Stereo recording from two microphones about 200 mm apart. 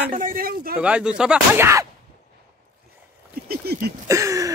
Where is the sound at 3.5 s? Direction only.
50° right (ahead or behind).